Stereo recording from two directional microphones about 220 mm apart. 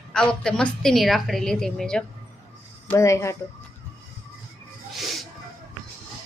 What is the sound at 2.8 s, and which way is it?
Speech, 15° left (ahead or behind).